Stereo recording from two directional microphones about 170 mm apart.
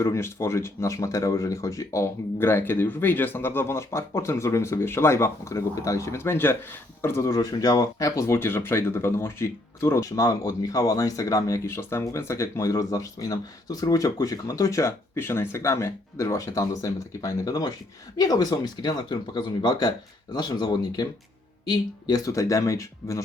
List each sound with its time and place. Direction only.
0.0 s speech: 15° left (ahead or behind)